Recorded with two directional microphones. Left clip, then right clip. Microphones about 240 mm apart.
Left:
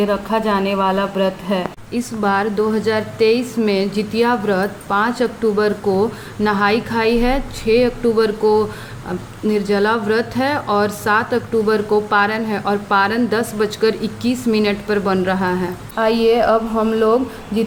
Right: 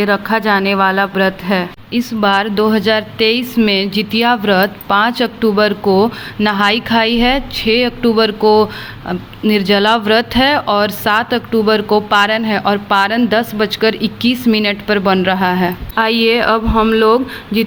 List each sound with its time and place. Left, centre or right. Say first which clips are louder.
0.0 s speech: right 4 dB; right
1.9 s speech: right 5 dB; right